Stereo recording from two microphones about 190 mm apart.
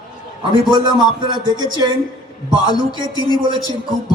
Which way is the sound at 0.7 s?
25° right (ahead or behind).